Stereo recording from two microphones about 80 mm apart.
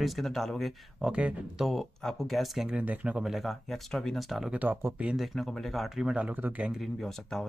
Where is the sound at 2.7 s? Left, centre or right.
Centre.